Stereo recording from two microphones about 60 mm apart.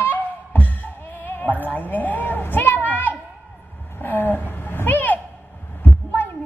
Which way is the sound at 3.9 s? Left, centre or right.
Left.